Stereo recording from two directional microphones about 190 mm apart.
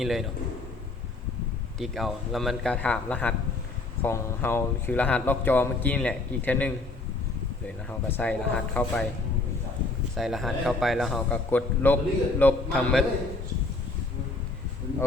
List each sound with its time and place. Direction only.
0.0 s a man's voice: centre (ahead or behind)
1.8 s a man's voice: centre (ahead or behind)
7.9 s speech: 10° left (ahead or behind)
10.2 s a man's voice: centre (ahead or behind)